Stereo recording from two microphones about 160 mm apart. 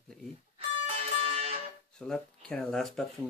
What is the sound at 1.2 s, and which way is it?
Music, 40° right (ahead or behind).